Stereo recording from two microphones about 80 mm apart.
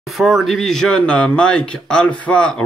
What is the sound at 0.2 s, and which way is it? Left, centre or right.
Speech, centre.